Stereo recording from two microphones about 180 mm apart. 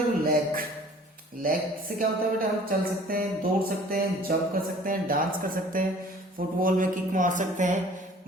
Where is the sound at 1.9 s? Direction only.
55° right (ahead or behind).